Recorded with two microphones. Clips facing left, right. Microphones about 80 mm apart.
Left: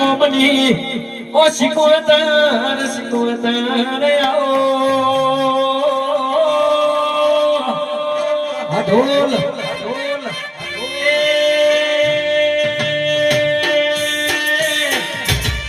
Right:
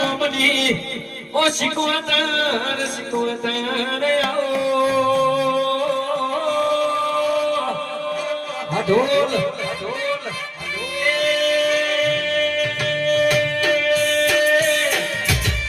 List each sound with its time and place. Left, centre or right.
0.0 s a man's voice: left
3.2 s music: left
11.0 s music: left